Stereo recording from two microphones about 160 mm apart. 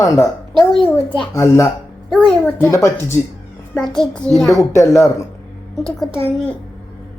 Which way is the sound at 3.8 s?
5° left (ahead or behind).